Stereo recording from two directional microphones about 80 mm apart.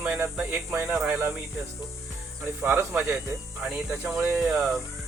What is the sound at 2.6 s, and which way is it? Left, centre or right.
Speech, centre.